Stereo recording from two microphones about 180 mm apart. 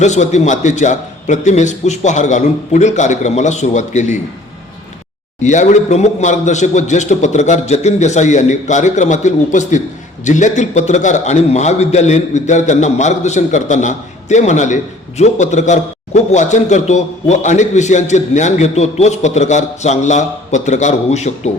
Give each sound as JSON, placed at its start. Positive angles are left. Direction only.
{"t": 0.0, "sound": "a man's voice", "side_deg": 40}
{"t": 5.4, "sound": "a man's voice", "side_deg": 40}